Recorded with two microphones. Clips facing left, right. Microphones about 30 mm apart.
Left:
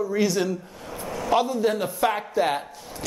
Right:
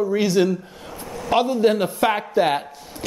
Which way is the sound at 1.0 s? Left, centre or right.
Centre.